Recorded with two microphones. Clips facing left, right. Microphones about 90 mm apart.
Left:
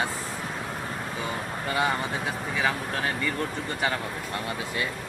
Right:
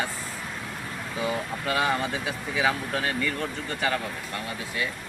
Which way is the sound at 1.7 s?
Centre (ahead or behind).